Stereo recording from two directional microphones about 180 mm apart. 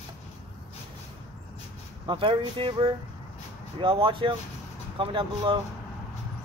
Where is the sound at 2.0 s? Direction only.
25° right (ahead or behind).